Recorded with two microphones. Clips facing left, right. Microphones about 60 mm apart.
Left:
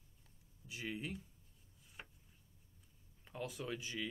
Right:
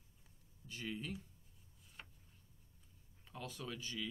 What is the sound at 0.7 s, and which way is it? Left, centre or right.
Speech, centre.